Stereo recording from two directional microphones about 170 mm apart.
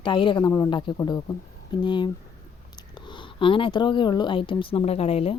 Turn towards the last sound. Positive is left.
turn(degrees=35)  # may be behind; listen again after turning